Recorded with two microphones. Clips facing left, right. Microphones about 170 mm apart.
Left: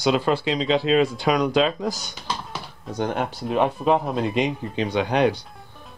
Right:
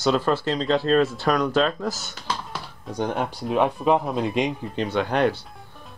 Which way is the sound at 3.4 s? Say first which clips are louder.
Even; centre (ahead or behind).